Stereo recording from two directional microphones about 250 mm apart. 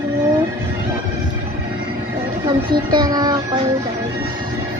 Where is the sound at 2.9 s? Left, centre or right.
Centre.